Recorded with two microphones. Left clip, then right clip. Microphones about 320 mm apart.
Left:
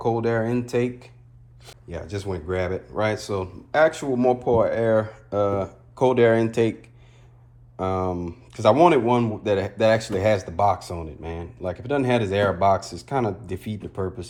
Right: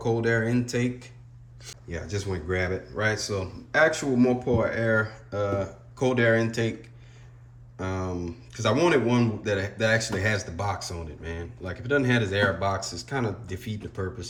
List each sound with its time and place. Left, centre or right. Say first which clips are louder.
0.0 s speech: left 2 dB; centre
1.6 s speech: left 1 dB; centre
7.8 s speech: left 7 dB; centre